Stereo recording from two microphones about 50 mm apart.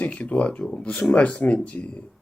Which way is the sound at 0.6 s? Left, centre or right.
Centre.